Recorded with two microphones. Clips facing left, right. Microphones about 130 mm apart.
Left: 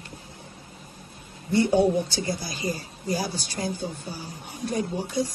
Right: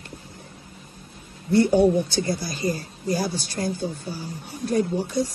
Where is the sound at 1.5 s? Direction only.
55° right (ahead or behind).